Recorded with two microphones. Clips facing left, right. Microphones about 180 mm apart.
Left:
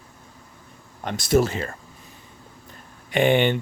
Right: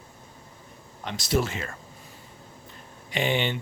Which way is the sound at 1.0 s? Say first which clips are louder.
Left 6 dB; 50° left (ahead or behind).